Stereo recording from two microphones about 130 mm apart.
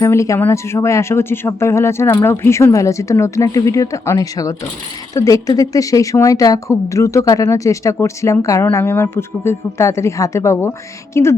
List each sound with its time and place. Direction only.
0.0 s speech: 20° left (ahead or behind)